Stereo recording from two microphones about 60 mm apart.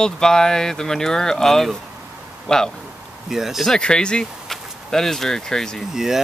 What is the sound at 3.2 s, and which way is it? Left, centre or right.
Speech, centre.